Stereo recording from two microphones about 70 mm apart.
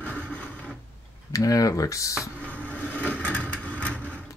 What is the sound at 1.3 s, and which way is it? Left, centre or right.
Speech, left.